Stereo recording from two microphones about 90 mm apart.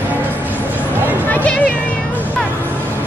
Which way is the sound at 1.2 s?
15° left (ahead or behind).